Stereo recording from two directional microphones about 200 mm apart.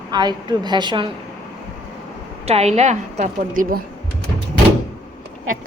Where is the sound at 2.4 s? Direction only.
30° right (ahead or behind).